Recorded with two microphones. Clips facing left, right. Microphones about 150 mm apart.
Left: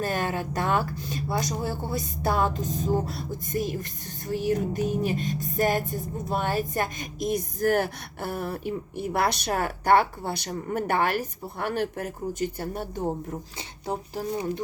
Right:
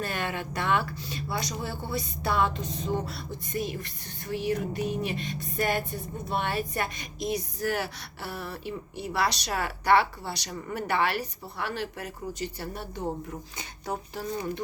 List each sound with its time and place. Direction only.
0.0 s speech: 45° left (ahead or behind)
13.6 s speech: 30° left (ahead or behind)